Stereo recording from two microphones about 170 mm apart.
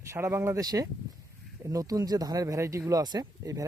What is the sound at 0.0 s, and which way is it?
Speech, 15° right (ahead or behind).